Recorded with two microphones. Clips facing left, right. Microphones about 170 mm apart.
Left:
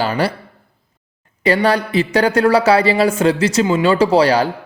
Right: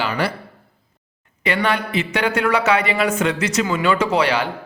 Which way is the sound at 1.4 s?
35° left (ahead or behind).